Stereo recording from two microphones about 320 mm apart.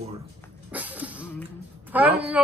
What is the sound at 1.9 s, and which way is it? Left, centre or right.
Speech, centre.